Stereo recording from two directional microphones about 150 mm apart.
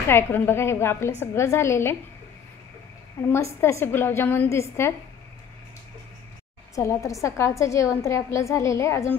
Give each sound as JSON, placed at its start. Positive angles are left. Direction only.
{"t": 0.1, "sound": "a woman's voice", "side_deg": 15}
{"t": 3.3, "sound": "a woman's voice", "side_deg": 20}
{"t": 6.7, "sound": "a woman's voice", "side_deg": 20}